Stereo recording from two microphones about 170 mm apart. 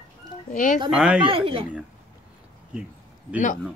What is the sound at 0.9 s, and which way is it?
Speech, 5° right (ahead or behind).